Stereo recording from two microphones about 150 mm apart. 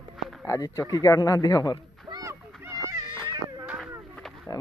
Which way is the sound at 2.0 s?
20° right (ahead or behind).